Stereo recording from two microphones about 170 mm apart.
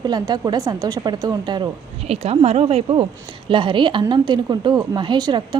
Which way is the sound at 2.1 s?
35° right (ahead or behind).